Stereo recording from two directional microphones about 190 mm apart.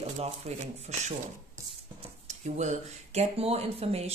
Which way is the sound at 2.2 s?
40° right (ahead or behind).